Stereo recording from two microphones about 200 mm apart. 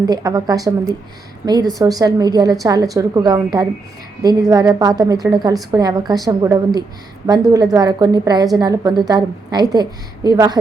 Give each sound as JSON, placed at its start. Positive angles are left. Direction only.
{"t": 0.0, "sound": "a woman's voice", "side_deg": -20}